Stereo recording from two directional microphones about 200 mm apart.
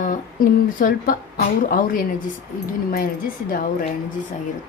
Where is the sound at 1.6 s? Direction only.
45° left (ahead or behind).